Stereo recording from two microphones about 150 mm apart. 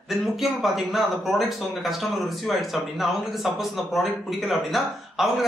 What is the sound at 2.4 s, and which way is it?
Speech, centre (ahead or behind).